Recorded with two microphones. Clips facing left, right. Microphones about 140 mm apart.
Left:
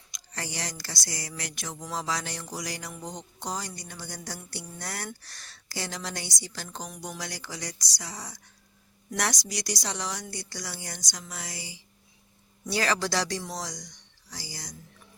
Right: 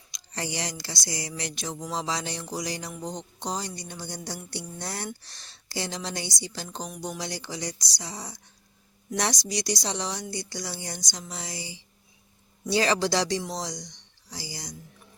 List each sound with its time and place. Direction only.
0.1 s speech: 20° right (ahead or behind)